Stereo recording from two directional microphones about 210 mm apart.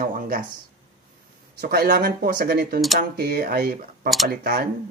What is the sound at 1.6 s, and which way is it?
Speech, 50° right (ahead or behind).